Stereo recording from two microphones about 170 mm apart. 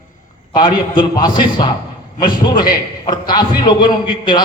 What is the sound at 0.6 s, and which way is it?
A man's voice, 25° left (ahead or behind).